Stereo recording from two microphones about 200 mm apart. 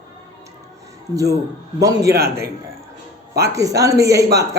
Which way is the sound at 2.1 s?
55° right (ahead or behind).